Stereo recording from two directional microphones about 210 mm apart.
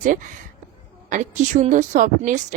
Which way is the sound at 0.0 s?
40° right (ahead or behind).